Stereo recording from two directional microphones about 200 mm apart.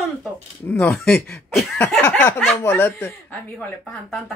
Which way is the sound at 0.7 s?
10° left (ahead or behind).